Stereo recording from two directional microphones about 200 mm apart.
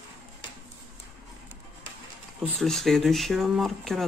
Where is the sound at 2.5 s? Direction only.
Centre (ahead or behind).